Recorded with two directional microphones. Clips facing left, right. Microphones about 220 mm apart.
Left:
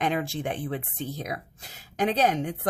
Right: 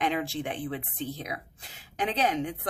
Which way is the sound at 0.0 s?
45° left (ahead or behind).